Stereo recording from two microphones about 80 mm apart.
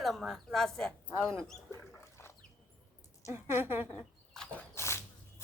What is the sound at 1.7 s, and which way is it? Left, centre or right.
Rodents, left.